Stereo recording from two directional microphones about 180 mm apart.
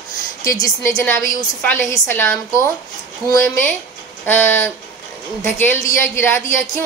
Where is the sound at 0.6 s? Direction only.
20° left (ahead or behind).